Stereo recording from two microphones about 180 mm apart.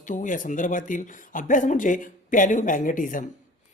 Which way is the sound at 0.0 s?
45° left (ahead or behind).